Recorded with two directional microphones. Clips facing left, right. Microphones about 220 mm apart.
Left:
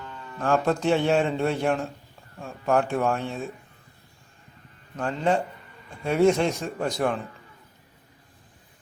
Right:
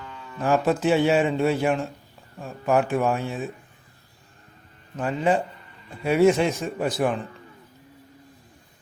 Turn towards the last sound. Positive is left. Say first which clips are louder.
# right 2 dB
turn(degrees=-5)  # may be behind; listen again after turning